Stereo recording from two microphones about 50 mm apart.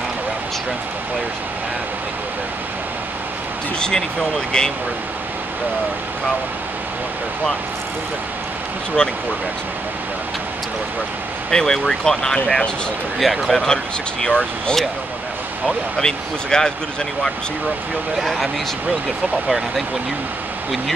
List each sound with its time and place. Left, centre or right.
3.8 s speech: centre
11.5 s speech: centre
13.2 s speech: centre
14.2 s speech: centre
16.0 s speech: centre
18.2 s speech: centre